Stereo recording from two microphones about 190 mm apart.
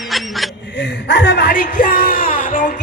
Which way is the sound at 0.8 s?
70° left (ahead or behind).